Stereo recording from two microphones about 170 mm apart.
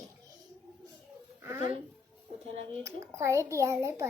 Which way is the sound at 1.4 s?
15° right (ahead or behind).